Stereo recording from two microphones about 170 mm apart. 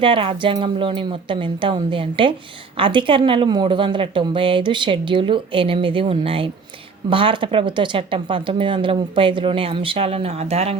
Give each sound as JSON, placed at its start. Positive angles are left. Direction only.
{"t": 0.0, "sound": "a woman's voice", "side_deg": -30}